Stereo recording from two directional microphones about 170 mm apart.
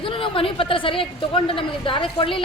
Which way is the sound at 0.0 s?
30° left (ahead or behind).